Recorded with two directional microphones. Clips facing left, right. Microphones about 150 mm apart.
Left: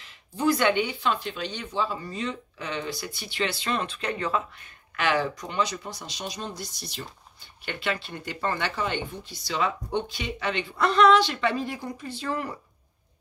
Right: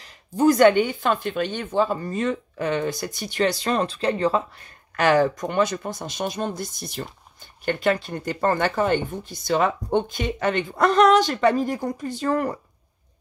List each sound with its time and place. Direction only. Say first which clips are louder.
0.0 s speech: right 7 dB; 45° right (ahead or behind)